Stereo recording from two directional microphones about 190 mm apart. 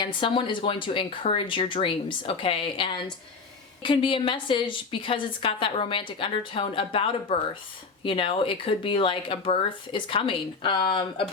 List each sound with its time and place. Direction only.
0.0 s a woman's voice: 25° left (ahead or behind)